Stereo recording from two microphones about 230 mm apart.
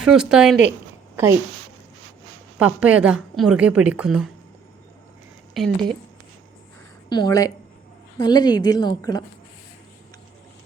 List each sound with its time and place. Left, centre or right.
0.0 s a woman's voice: centre
2.6 s a woman's voice: centre
5.6 s a woman's voice: centre
7.1 s a woman's voice: centre